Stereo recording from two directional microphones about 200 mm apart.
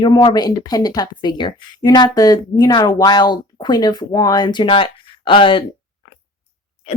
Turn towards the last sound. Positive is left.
turn(degrees=25)  # may be behind; listen again after turning